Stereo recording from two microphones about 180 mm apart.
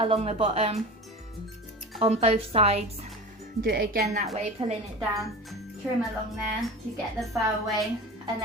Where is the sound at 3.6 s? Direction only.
55° right (ahead or behind).